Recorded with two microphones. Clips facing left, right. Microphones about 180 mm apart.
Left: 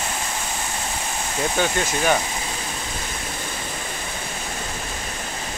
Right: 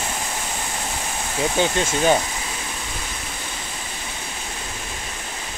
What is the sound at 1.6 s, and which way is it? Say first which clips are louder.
Speech: right 3 dB; 25° right (ahead or behind).